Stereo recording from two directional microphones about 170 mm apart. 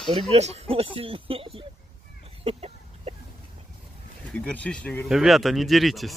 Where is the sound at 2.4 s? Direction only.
35° right (ahead or behind).